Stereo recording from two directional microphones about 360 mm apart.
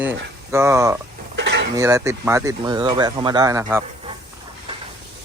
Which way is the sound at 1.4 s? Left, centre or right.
Right.